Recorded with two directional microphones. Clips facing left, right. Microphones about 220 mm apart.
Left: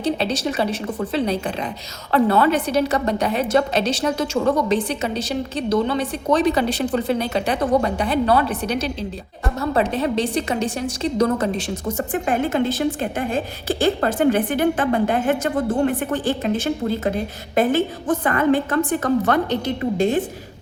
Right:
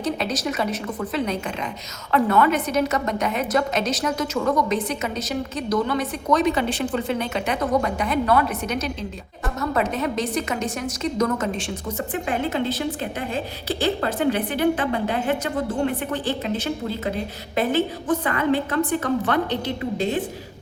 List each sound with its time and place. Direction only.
0.0 s a woman's voice: 30° left (ahead or behind); by 20.1 s 45° left (ahead or behind)